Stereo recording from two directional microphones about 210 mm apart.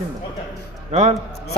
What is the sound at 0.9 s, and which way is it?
Speech, 30° right (ahead or behind).